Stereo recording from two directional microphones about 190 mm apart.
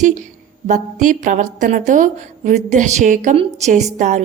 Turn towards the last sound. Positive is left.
turn(degrees=-40)  # may be behind; listen again after turning